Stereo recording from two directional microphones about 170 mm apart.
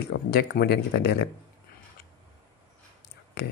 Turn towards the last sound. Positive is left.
turn(degrees=75)  # may be behind; listen again after turning